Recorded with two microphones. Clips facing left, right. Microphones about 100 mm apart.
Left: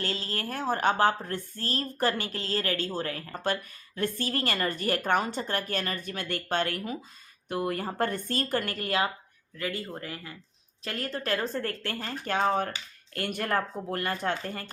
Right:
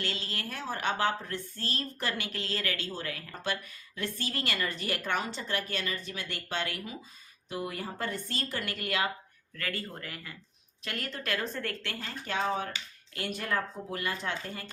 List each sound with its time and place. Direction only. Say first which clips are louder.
0.0 s speech: left 4 dB; 40° left (ahead or behind)
9.6 s speech: left 4 dB; 20° left (ahead or behind); by 14.7 s 50° left (ahead or behind)